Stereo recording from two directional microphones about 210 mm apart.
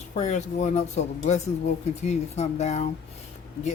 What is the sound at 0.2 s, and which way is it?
Speech, 35° left (ahead or behind).